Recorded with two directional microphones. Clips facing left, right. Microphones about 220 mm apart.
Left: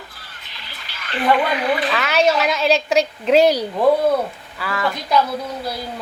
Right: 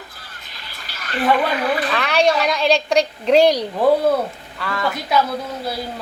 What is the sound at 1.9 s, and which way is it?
A woman's voice, 5° left (ahead or behind).